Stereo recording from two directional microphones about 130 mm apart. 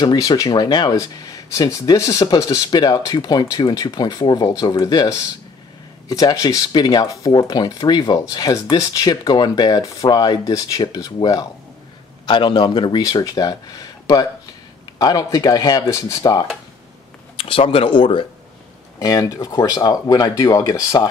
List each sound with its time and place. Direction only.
0.0 s speech: 35° left (ahead or behind)
17.4 s speech: 45° left (ahead or behind)
18.9 s speech: 25° left (ahead or behind)